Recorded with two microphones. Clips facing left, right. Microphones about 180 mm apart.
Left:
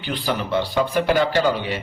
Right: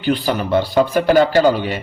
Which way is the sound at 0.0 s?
40° right (ahead or behind).